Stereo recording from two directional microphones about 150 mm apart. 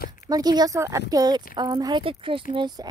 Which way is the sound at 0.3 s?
25° right (ahead or behind).